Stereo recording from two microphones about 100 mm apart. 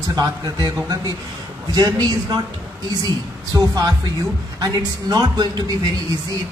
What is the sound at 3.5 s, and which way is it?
Speech, 40° right (ahead or behind).